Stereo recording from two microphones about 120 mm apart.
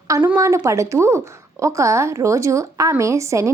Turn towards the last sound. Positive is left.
turn(degrees=-25)  # may be behind; listen again after turning